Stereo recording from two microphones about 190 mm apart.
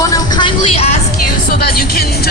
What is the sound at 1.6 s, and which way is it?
Speech, 55° left (ahead or behind).